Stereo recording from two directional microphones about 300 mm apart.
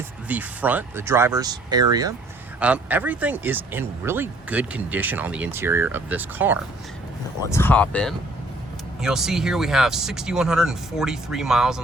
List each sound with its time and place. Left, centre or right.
0.3 s speech: centre
7.5 s speech: centre